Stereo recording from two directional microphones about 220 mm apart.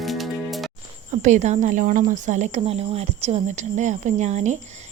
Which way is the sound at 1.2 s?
30° right (ahead or behind).